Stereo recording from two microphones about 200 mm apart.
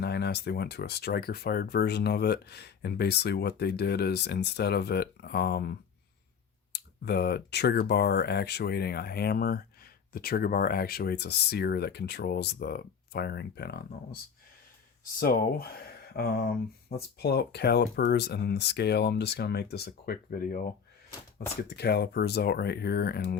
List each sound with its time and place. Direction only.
0.0 s speech: 55° left (ahead or behind)
6.7 s speech: 55° left (ahead or behind)
15.2 s speech: 50° left (ahead or behind)